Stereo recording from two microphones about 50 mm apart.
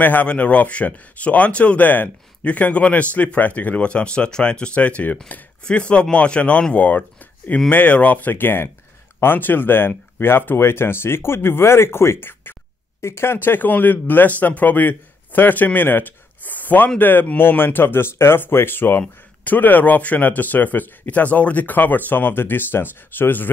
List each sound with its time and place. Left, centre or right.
0.0 s speech: left
7.2 s a sound: left
7.7 s speech: left